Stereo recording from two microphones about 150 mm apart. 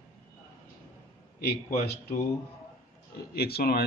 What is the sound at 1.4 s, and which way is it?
Speech, 85° left.